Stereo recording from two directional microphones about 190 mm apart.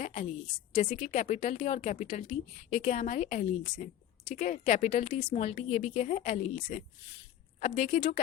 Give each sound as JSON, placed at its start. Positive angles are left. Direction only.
{"t": 0.0, "sound": "a woman's voice", "side_deg": 40}